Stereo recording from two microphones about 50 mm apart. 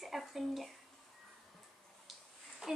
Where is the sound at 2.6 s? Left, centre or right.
Centre.